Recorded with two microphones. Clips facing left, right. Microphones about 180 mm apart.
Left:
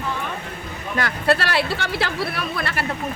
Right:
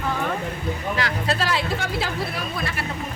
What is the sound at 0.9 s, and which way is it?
Speech, 55° left (ahead or behind).